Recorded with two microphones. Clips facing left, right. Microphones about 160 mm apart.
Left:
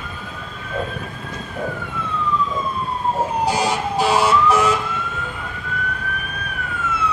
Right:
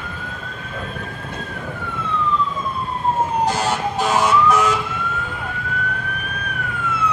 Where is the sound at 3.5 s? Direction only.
10° left (ahead or behind).